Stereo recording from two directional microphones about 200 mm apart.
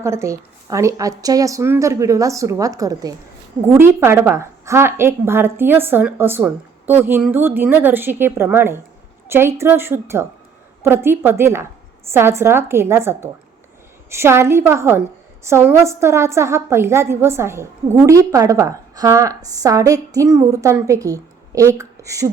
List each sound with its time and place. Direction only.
0.0 s a woman's voice: 15° right (ahead or behind)